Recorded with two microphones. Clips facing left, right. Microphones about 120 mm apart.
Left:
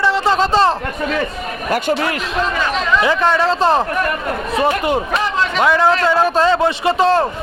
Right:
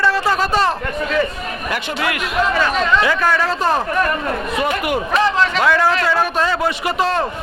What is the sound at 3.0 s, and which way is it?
Speech, 25° left (ahead or behind).